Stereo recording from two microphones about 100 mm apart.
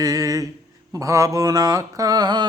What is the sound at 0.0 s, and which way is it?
Speech, 40° right (ahead or behind).